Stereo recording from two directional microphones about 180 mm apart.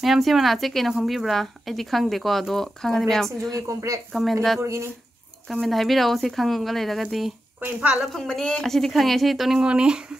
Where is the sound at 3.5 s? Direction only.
20° right (ahead or behind).